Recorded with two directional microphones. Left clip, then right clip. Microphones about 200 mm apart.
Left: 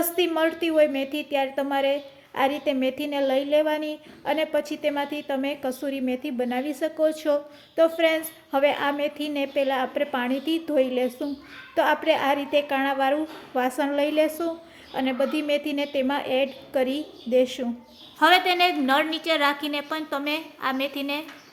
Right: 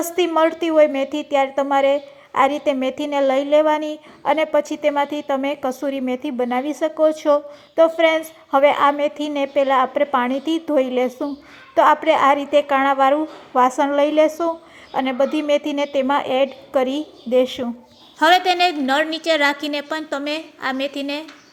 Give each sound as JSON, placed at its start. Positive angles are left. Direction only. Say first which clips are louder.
{"t": 0.0, "sound": "a woman's voice", "louder": "right 6 dB", "side_deg": -20}